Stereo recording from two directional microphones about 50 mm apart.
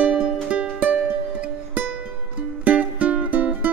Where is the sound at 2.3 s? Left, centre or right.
Right.